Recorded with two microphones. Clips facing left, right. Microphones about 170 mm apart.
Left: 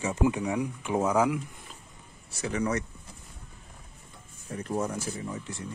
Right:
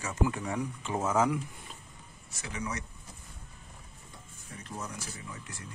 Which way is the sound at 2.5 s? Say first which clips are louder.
Left 9 dB; 55° left (ahead or behind).